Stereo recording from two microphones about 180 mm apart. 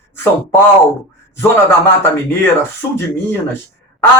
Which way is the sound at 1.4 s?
10° left (ahead or behind).